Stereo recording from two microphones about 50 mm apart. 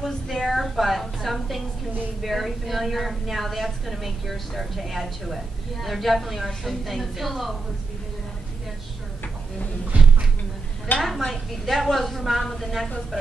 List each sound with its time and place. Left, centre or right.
0.0 s a woman's voice: centre
9.9 s a sound: right
11.0 s a woman's voice: centre